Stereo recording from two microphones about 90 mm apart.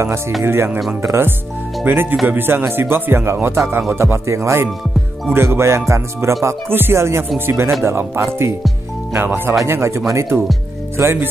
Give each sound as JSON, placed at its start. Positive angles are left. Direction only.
{"t": 0.4, "sound": "music", "side_deg": -30}
{"t": 1.0, "sound": "speech", "side_deg": -25}
{"t": 3.9, "sound": "music", "side_deg": -30}
{"t": 5.3, "sound": "speech", "side_deg": -30}
{"t": 9.7, "sound": "music", "side_deg": -30}
{"t": 11.0, "sound": "speech", "side_deg": -25}